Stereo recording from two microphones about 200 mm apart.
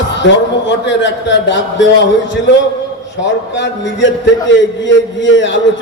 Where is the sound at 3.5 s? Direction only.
65° left (ahead or behind).